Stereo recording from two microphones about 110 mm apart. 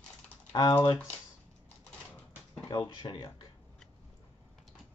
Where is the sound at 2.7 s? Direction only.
45° left (ahead or behind).